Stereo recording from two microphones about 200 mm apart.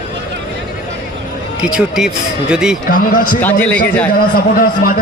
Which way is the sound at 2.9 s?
40° left (ahead or behind).